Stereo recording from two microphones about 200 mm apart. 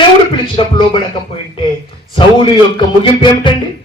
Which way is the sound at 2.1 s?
25° left (ahead or behind).